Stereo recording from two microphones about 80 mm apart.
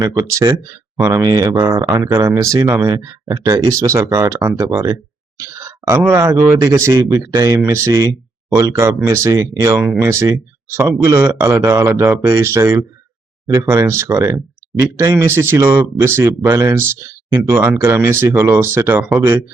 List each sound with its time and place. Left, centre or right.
0.2 s speech: right
1.5 s speech: right
4.4 s speech: right
7.6 s speech: right